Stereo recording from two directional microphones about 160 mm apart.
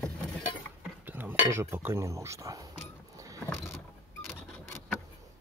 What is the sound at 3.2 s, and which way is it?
Vehicle, 20° right (ahead or behind).